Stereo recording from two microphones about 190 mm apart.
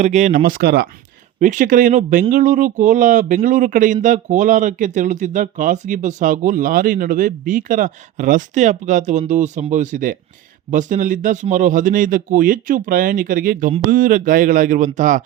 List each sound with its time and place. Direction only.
0.0 s speech: 40° right (ahead or behind); by 0.9 s 55° right (ahead or behind)
1.4 s speech: 40° right (ahead or behind)